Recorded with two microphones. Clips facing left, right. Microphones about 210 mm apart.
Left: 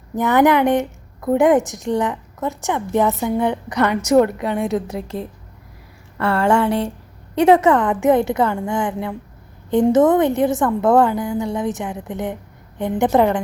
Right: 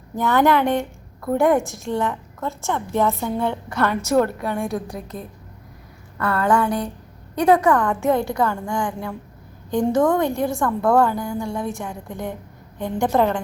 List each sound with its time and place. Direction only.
0.2 s a woman's voice: 20° left (ahead or behind)